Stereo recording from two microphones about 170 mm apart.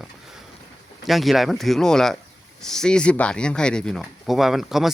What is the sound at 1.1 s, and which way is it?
Speech, centre (ahead or behind).